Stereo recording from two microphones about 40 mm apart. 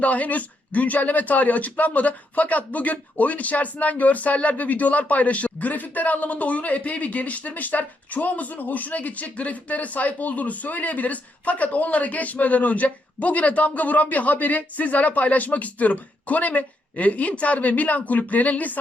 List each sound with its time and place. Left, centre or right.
0.0 s speech: left